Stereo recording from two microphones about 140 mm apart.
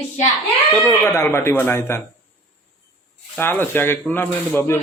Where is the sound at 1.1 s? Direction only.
20° left (ahead or behind).